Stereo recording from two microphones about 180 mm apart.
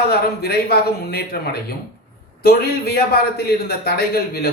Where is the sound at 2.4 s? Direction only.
55° left (ahead or behind).